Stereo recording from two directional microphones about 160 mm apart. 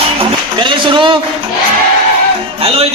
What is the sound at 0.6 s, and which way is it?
Music, 30° right (ahead or behind).